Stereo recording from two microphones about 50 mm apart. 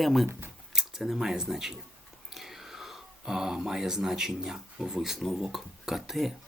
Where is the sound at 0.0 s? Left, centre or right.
Centre.